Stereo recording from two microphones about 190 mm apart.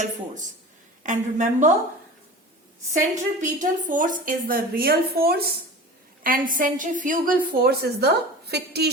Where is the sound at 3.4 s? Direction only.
45° right (ahead or behind).